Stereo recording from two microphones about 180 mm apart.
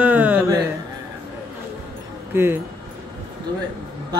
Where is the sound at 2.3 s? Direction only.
15° right (ahead or behind).